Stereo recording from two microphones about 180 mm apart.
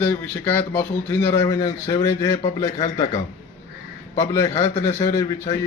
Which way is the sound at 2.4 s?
40° left (ahead or behind).